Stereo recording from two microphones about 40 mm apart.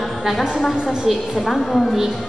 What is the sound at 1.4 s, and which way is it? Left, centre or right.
Speech, centre.